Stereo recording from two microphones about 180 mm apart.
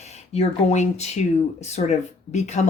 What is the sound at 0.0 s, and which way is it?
Speech, 40° left (ahead or behind).